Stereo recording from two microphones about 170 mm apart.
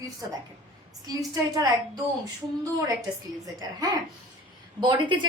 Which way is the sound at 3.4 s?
20° right (ahead or behind).